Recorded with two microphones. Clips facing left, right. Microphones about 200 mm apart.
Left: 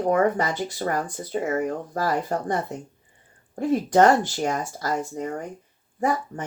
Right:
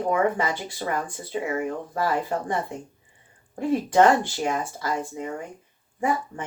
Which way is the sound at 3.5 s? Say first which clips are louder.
Left 1 dB; 40° left (ahead or behind).